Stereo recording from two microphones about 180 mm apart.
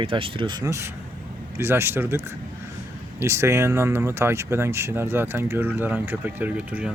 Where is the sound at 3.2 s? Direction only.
15° right (ahead or behind).